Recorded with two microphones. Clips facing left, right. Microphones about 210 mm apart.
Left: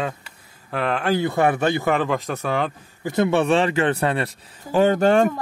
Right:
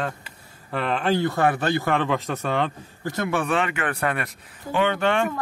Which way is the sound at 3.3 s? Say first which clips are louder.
Left 4 dB; 25° left (ahead or behind).